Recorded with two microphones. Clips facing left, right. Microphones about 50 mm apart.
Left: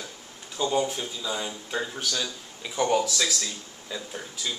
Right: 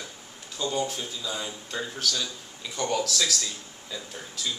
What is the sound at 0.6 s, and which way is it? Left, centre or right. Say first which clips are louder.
Speech: left 3 dB; centre.